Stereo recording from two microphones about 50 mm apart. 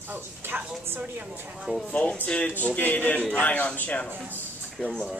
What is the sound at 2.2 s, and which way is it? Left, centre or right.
Speech, left.